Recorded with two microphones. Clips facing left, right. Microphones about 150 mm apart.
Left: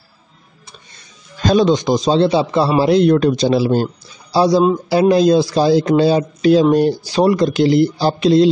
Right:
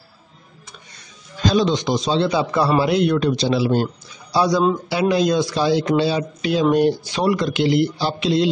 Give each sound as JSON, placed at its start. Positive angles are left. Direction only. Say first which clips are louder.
{"t": 1.4, "sound": "speech", "louder": "left 5 dB", "side_deg": 50}